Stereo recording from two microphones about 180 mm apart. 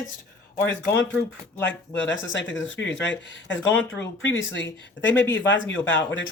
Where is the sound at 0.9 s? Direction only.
10° left (ahead or behind).